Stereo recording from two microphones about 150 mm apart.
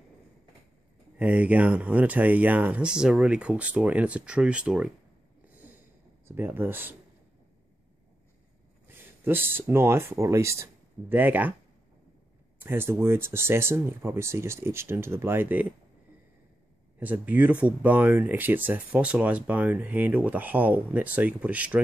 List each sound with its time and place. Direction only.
1.1 s speech: 10° right (ahead or behind)
5.5 s a sound: 10° right (ahead or behind)
6.2 s speech: 15° right (ahead or behind)
8.8 s speech: 15° right (ahead or behind)
12.5 s speech: 15° right (ahead or behind)
17.0 s speech: 10° right (ahead or behind)